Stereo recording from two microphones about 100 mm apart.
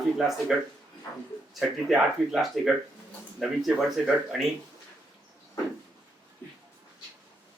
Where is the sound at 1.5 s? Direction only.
Centre (ahead or behind).